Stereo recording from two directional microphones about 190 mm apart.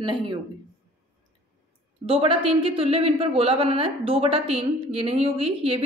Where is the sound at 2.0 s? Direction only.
30° right (ahead or behind).